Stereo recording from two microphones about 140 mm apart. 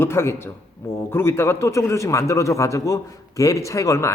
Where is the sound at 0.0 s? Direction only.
15° left (ahead or behind).